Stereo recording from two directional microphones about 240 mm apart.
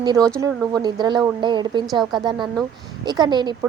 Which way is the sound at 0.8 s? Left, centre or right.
Centre.